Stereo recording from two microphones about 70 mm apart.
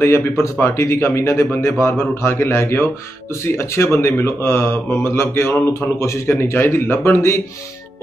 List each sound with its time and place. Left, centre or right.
0.0 s speech: left